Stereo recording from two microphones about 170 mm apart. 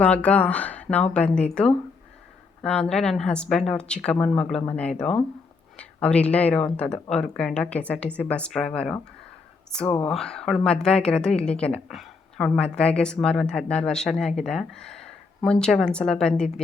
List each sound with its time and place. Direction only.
0.0 s a woman's voice: 5° left (ahead or behind)